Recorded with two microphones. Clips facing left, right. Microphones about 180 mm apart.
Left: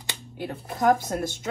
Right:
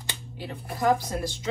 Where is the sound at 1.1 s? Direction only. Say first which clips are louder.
Left 3 dB; 55° left (ahead or behind).